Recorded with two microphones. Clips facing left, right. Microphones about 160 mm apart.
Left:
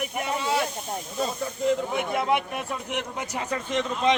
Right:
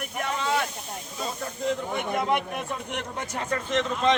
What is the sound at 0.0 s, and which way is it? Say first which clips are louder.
Snake: left 1 dB; 10° left (ahead or behind).